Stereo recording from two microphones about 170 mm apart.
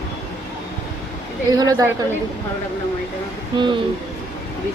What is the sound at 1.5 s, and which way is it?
Speech, 20° right (ahead or behind).